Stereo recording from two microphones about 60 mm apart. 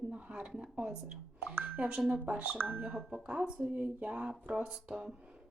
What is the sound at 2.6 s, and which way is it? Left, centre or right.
Speech, right.